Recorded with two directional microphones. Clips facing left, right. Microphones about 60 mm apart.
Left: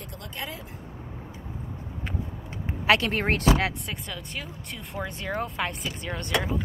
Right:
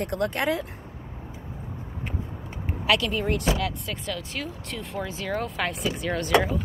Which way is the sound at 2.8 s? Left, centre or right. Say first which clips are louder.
Left 2 dB; left.